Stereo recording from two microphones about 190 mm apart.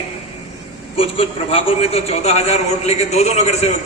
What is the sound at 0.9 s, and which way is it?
A man's voice, 30° left (ahead or behind).